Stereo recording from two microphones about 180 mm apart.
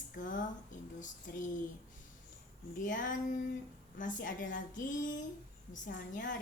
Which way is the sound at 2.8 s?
45° left (ahead or behind).